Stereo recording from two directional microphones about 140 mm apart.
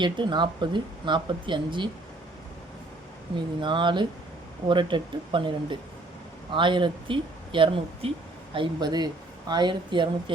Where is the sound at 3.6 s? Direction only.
35° right (ahead or behind).